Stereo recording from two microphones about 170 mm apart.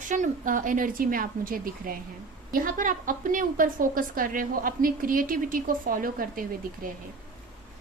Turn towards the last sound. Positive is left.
turn(degrees=-55)  # may be behind; listen again after turning